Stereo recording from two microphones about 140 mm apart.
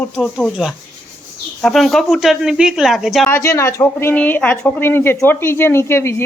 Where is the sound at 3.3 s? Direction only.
20° left (ahead or behind).